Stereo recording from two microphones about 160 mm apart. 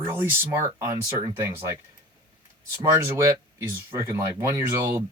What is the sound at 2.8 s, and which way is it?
Speech, 15° right (ahead or behind).